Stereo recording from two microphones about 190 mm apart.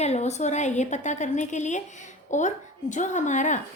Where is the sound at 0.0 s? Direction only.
35° left (ahead or behind).